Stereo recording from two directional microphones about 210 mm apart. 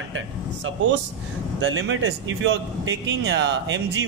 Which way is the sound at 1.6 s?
65° right (ahead or behind).